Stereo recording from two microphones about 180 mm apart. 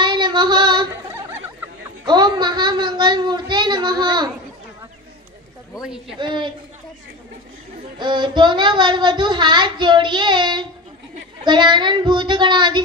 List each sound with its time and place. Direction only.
0.0 s female singing: 25° right (ahead or behind)
2.0 s child singing: 25° right (ahead or behind)
5.8 s speech: 5° right (ahead or behind)
6.1 s child singing: 25° right (ahead or behind)
8.0 s child singing: 25° right (ahead or behind)